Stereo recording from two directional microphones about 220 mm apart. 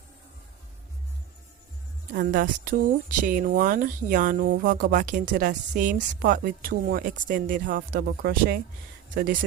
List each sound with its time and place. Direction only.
2.1 s speech: 40° right (ahead or behind)